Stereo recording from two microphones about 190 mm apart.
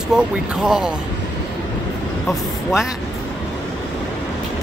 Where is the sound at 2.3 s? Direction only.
Centre (ahead or behind).